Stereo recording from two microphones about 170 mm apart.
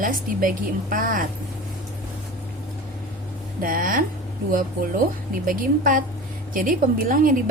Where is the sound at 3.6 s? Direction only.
55° right (ahead or behind).